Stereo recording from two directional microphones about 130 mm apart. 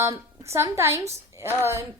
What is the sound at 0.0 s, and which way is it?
A woman's voice, 20° right (ahead or behind).